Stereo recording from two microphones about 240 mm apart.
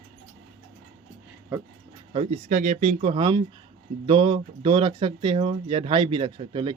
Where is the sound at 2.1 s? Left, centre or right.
Right.